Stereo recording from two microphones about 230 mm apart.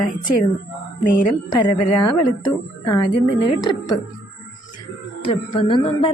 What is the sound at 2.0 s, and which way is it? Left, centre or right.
A woman's voice, centre.